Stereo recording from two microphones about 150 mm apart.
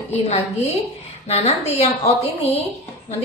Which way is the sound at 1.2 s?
45° left (ahead or behind).